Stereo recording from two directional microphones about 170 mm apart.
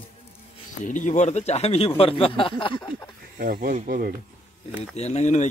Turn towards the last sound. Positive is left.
turn(degrees=40)  # may be behind; listen again after turning